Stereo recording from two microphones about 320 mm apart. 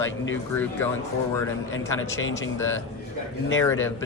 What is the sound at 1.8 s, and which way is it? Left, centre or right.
Speech, centre.